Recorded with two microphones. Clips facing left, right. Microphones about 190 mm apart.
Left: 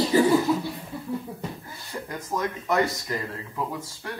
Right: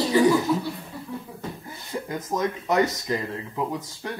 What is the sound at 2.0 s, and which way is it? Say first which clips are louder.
Speech: right 2 dB; 20° right (ahead or behind).